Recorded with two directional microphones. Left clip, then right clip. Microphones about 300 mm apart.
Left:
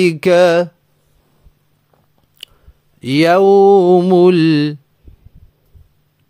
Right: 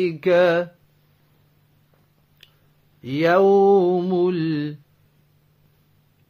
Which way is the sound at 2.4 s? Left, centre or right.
Left.